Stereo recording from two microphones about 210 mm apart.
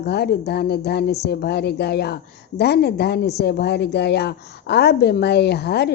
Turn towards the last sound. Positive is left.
turn(degrees=50)  # may be behind; listen again after turning